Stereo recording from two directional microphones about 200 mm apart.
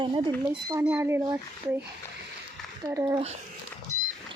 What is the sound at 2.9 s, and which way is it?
Speech, 20° right (ahead or behind).